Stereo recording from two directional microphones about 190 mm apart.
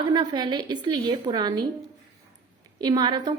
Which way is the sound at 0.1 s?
20° right (ahead or behind).